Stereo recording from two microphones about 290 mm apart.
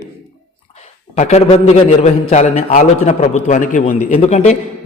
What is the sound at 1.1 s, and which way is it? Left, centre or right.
A man's voice, left.